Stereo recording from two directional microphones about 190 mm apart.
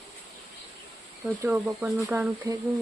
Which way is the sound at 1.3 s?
10° right (ahead or behind).